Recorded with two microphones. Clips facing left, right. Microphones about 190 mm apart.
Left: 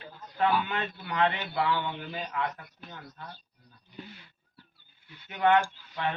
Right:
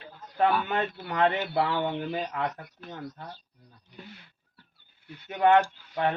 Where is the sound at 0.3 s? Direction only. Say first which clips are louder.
Right 2 dB; 45° right (ahead or behind).